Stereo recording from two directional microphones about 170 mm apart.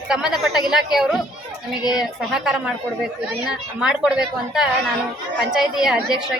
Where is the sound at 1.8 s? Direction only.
25° left (ahead or behind).